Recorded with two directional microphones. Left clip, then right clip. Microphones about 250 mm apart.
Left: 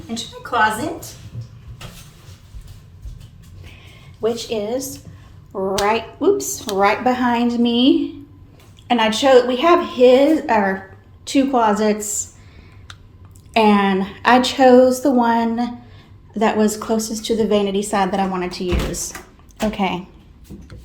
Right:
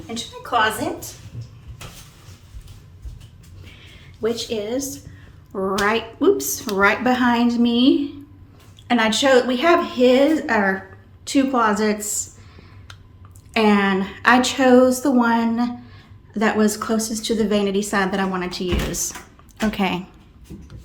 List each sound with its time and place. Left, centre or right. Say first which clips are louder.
0.1 s a woman's voice: even; centre
4.2 s a woman's voice: left 2 dB; centre
5.5 s a woman's voice: left 2 dB; centre
13.5 s a woman's voice: left 3 dB; centre